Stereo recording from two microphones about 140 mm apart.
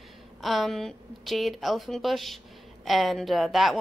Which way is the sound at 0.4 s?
Centre (ahead or behind).